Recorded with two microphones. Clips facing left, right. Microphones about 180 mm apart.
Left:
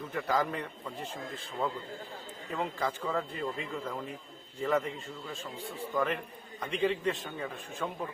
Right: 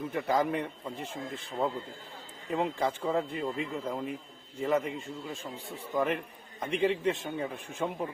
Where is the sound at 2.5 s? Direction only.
25° right (ahead or behind).